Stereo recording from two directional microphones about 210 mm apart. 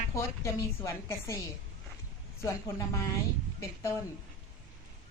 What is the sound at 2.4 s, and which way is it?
Speech, 15° left (ahead or behind).